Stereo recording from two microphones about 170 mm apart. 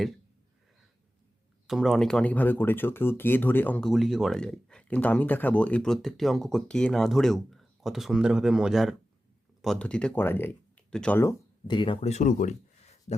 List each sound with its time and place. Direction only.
1.6 s speech: centre (ahead or behind)
11.7 s speech: 30° left (ahead or behind); by 12.5 s 45° left (ahead or behind)
13.1 s a sound: 40° left (ahead or behind)